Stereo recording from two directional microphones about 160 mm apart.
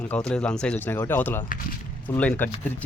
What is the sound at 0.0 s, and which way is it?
Speech, 5° left (ahead or behind).